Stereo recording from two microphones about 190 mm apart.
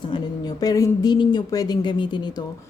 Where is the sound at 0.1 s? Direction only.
20° left (ahead or behind).